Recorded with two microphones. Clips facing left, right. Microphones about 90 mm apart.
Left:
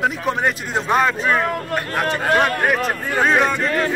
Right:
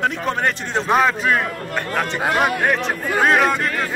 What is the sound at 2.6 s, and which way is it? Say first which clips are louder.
Speech: even; 5° left (ahead or behind).